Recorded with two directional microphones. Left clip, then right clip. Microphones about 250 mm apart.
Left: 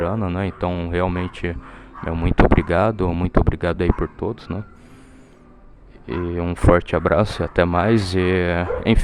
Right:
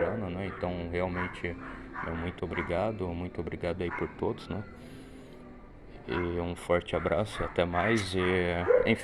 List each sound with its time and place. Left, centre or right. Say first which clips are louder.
0.0 s speech: left 8 dB; left
6.1 s speech: left 7 dB; left